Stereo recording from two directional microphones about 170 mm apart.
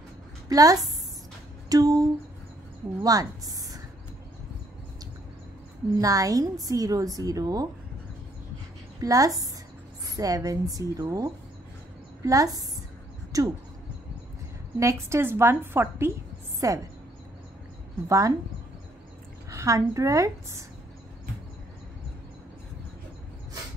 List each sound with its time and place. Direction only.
0.5 s a woman's voice: 20° right (ahead or behind)
3.0 s a sound: 20° right (ahead or behind)
5.9 s a woman's voice: 20° right (ahead or behind)
9.0 s a woman's voice: 20° right (ahead or behind)
14.8 s a woman's voice: 15° right (ahead or behind)
18.0 s a woman's voice: 20° right (ahead or behind)
19.5 s a woman's voice: 20° right (ahead or behind)